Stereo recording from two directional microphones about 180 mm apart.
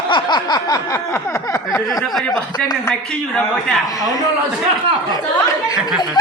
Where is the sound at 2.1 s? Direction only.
5° left (ahead or behind).